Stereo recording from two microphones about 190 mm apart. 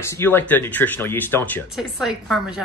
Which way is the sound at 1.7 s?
Centre (ahead or behind).